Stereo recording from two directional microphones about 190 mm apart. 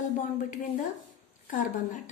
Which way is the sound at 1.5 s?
45° left (ahead or behind).